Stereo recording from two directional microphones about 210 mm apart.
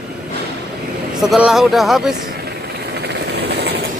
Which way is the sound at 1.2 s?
Centre (ahead or behind).